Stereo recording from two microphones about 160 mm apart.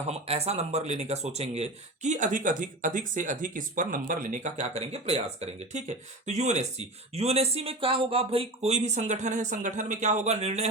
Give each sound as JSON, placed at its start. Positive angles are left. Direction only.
{"t": 0.1, "sound": "speech", "side_deg": -40}